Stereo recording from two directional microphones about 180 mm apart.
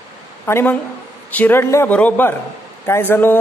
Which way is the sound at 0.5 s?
15° left (ahead or behind).